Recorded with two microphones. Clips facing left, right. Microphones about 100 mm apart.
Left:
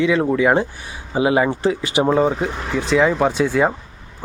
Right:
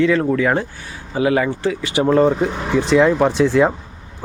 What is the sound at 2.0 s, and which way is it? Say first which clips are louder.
Speech: right 3 dB; 10° left (ahead or behind).